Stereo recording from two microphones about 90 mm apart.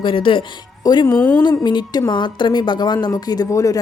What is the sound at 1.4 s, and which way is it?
A woman's voice, 55° left (ahead or behind).